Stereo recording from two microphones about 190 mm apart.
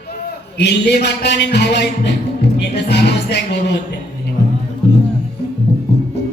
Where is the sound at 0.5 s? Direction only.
60° left (ahead or behind).